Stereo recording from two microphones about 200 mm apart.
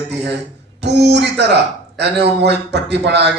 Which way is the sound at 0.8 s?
55° right (ahead or behind).